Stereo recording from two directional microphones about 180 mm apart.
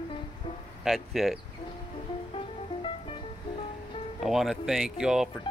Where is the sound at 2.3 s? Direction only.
30° left (ahead or behind).